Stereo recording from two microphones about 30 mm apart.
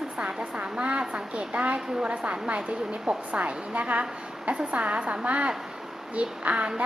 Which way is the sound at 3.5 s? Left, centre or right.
Right.